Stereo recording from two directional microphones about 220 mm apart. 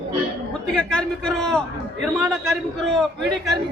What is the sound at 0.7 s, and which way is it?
A man's voice, 5° left (ahead or behind).